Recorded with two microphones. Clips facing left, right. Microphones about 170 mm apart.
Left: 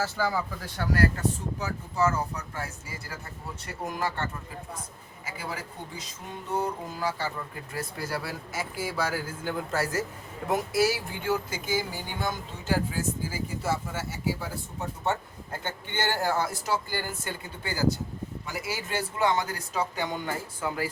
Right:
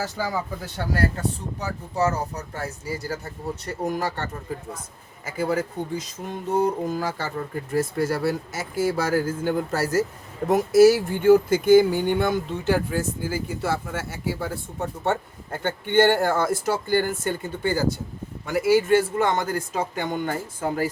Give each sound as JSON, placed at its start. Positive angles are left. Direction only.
{"t": 0.0, "sound": "speech", "side_deg": -15}
{"t": 1.5, "sound": "speech", "side_deg": -35}